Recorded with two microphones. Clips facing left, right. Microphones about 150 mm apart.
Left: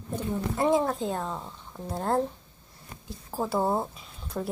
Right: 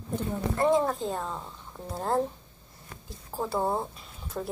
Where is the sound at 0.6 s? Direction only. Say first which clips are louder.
Even; 10° left (ahead or behind).